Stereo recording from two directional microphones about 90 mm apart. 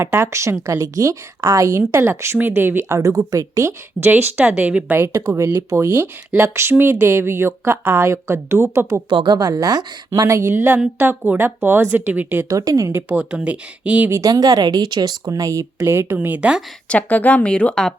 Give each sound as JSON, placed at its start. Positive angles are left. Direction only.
{"t": 0.0, "sound": "speech", "side_deg": -30}
{"t": 4.1, "sound": "speech", "side_deg": -20}
{"t": 5.0, "sound": "speech", "side_deg": -30}
{"t": 9.0, "sound": "speech", "side_deg": -55}
{"t": 12.5, "sound": "speech", "side_deg": -40}
{"t": 13.1, "sound": "speech", "side_deg": -10}
{"t": 14.1, "sound": "speech", "side_deg": -40}
{"t": 16.1, "sound": "speech", "side_deg": -15}
{"t": 16.9, "sound": "a woman's voice", "side_deg": 15}